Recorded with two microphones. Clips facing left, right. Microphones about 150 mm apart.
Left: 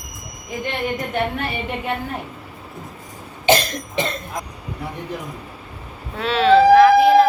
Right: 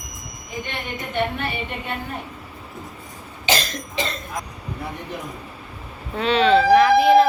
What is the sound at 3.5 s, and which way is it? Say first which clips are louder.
Cough: left 6 dB; 55° left (ahead or behind).